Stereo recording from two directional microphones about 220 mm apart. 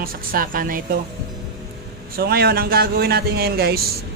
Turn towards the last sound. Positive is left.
turn(degrees=-45)  # may be behind; listen again after turning